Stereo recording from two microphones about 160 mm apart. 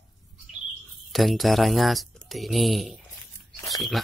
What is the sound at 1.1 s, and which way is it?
Speech, centre (ahead or behind).